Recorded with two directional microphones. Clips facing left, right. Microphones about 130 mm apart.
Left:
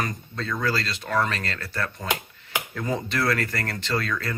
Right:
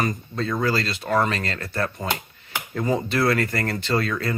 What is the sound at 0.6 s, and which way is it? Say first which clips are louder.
Speech: right 2 dB; 15° right (ahead or behind).